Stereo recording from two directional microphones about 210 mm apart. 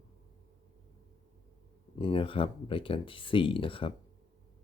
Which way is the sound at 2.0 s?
25° left (ahead or behind).